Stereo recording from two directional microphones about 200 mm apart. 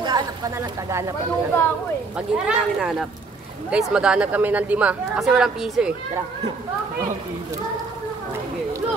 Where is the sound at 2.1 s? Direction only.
5° right (ahead or behind).